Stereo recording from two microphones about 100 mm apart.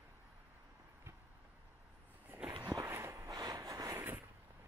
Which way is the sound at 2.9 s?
25° right (ahead or behind).